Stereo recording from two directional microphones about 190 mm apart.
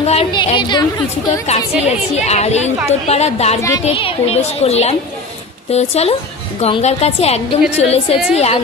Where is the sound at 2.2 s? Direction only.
35° left (ahead or behind).